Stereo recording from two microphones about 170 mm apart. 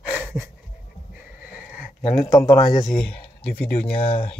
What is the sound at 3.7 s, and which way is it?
Speech, 35° left (ahead or behind).